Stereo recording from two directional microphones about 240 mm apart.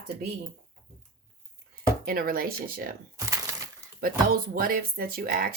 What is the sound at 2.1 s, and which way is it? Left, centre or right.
Speech, right.